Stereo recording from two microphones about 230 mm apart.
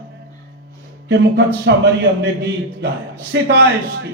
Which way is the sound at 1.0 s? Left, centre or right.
Right.